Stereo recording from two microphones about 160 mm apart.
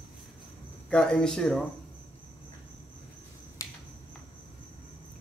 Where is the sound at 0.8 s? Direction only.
5° left (ahead or behind).